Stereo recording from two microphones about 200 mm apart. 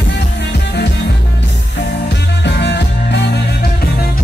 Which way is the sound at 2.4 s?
60° left (ahead or behind).